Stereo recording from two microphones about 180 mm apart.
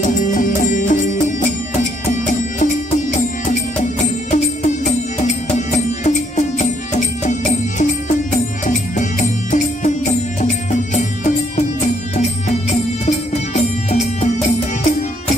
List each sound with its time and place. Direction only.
0.1 s music: 45° left (ahead or behind)
13.6 s music: 35° left (ahead or behind)